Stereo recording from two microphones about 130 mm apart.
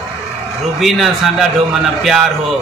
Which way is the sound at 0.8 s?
Centre (ahead or behind).